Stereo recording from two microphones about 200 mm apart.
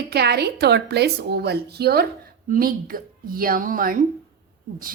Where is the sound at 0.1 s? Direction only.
55° right (ahead or behind).